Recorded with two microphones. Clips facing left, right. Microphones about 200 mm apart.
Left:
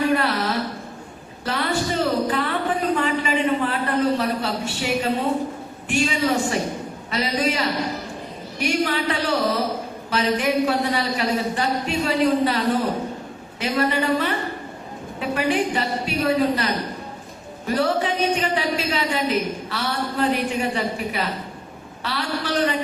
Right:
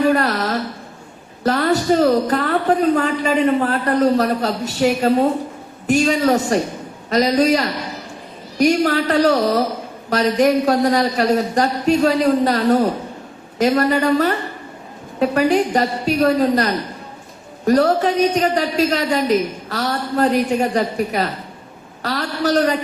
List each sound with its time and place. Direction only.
0.1 s music: 40° right (ahead or behind)
1.5 s a woman's voice: 40° right (ahead or behind)
17.7 s a man's voice: 40° right (ahead or behind)